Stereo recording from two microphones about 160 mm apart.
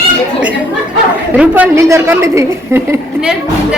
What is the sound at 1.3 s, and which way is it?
A woman's voice, 10° right (ahead or behind).